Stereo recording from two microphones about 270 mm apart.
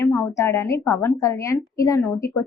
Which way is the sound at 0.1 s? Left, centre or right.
Centre.